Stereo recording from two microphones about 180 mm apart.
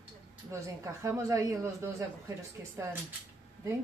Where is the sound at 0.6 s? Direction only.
15° right (ahead or behind).